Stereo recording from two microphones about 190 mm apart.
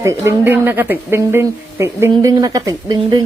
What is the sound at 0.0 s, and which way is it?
Speech, 15° right (ahead or behind).